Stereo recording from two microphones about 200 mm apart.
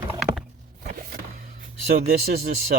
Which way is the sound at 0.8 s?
45° right (ahead or behind).